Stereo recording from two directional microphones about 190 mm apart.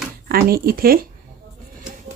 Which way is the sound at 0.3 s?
50° right (ahead or behind).